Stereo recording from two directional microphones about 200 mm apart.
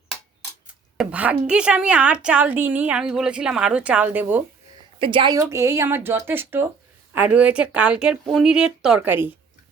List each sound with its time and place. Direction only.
0.9 s a woman's voice: 5° right (ahead or behind)
4.9 s a woman's voice: 25° right (ahead or behind)
5.4 s a woman's voice: 15° right (ahead or behind)